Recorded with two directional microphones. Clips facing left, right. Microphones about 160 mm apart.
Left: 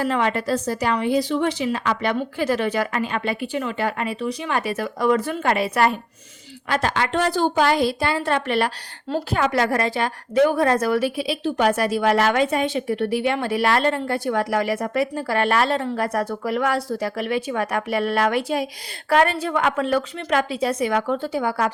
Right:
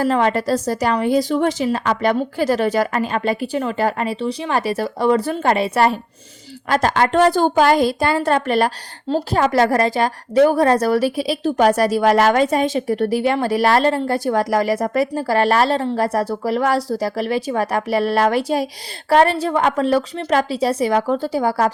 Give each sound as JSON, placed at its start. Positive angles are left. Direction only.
{"t": 0.0, "sound": "a woman's voice", "side_deg": -35}
{"t": 6.7, "sound": "a woman's voice", "side_deg": -40}